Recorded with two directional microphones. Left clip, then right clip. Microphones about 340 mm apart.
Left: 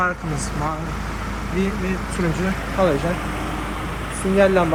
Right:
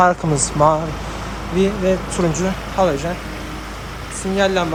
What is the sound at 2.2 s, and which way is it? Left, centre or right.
Speech, centre.